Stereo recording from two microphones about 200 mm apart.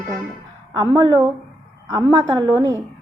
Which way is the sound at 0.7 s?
20° right (ahead or behind).